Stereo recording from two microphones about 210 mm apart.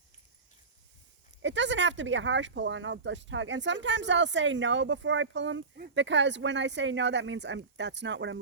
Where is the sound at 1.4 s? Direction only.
60° right (ahead or behind).